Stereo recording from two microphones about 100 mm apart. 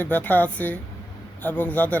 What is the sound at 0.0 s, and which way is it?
Speech, 20° left (ahead or behind).